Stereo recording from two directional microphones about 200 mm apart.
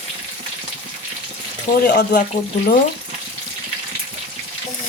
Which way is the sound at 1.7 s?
40° left (ahead or behind).